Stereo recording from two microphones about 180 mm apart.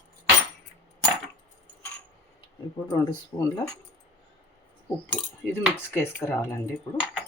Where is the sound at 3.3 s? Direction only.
30° left (ahead or behind).